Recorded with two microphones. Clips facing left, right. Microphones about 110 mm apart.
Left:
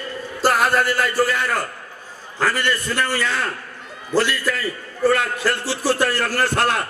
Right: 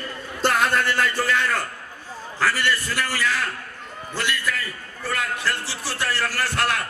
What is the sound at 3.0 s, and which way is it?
A man's voice, 30° left (ahead or behind).